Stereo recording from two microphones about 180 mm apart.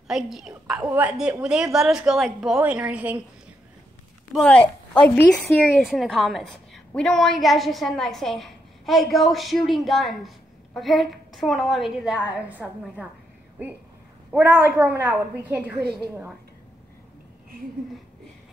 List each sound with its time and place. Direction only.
0.1 s a woman's voice: centre (ahead or behind)
4.3 s a woman's voice: 5° left (ahead or behind)
15.8 s a woman's voice: 65° right (ahead or behind)